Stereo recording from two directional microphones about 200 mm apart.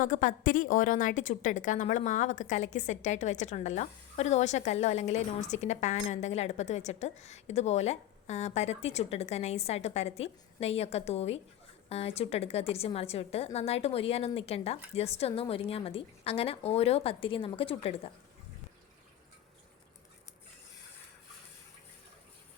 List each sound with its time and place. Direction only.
0.0 s a woman's voice: 40° left (ahead or behind)